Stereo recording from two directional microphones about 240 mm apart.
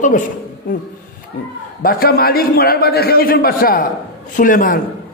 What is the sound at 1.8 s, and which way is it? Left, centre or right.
A man's voice, left.